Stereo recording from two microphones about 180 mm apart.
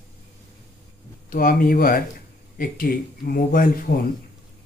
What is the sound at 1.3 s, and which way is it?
Speech, 50° left (ahead or behind).